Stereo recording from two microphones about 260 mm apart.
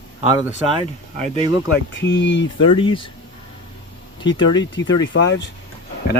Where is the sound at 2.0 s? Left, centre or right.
Left.